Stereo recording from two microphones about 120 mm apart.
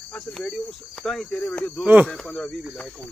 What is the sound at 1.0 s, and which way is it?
Cricket, 5° left (ahead or behind).